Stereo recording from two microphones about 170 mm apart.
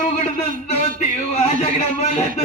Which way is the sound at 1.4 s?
40° left (ahead or behind).